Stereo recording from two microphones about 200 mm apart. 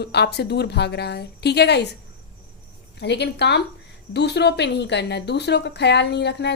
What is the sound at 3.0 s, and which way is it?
A woman's voice, 60° left (ahead or behind).